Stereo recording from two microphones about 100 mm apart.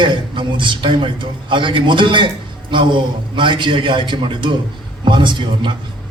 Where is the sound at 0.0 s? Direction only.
55° right (ahead or behind).